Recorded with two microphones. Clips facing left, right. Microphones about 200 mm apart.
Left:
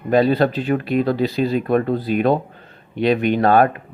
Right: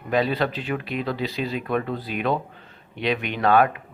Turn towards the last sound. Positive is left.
turn(degrees=40)  # may be behind; listen again after turning